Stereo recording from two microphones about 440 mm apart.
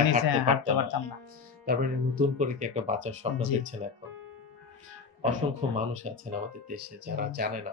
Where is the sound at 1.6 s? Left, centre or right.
Centre.